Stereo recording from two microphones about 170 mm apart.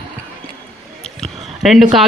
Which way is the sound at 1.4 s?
Centre (ahead or behind).